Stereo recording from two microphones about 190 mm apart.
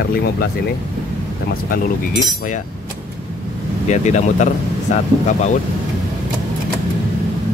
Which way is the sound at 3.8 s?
40° left (ahead or behind).